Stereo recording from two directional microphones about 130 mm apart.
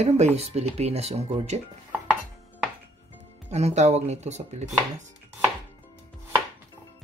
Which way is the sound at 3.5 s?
55° right (ahead or behind).